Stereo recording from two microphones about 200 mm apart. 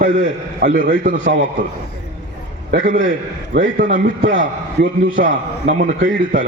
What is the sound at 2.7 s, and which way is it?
A man's voice, 45° right (ahead or behind).